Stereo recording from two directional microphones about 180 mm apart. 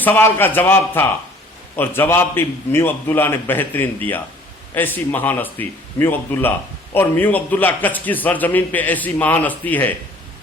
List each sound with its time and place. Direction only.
0.0 s a man's voice: 10° left (ahead or behind)